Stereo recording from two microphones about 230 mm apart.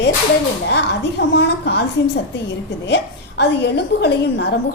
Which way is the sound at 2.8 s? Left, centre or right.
Left.